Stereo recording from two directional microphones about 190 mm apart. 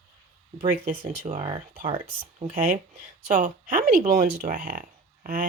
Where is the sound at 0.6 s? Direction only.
45° right (ahead or behind).